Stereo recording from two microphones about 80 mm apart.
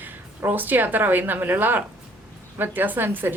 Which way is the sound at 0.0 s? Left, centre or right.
Right.